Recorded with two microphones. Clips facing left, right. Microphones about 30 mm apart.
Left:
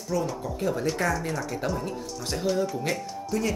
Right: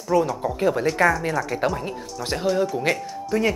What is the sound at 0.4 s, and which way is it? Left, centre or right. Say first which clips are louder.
Speech: right 7 dB; right.